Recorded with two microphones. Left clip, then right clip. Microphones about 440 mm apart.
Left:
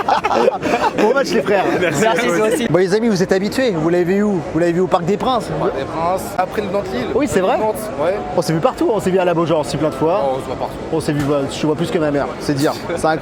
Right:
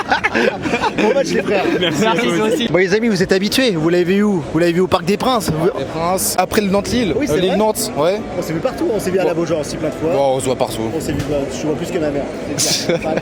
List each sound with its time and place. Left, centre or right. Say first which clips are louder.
0.1 s a sound: left 1 dB; centre
1.0 s speech: left 1 dB; centre
1.7 s speech: left 1 dB; centre
2.7 s speech: right 1 dB; centre
6.3 s speech: right 3 dB; right
8.6 s speech: even; left